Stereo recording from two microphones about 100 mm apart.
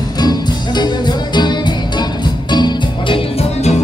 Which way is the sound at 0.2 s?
45° left (ahead or behind).